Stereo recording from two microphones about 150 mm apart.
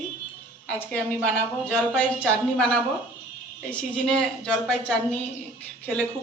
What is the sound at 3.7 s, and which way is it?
Speech, 5° left (ahead or behind).